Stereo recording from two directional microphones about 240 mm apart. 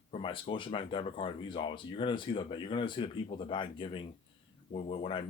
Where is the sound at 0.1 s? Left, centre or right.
Left.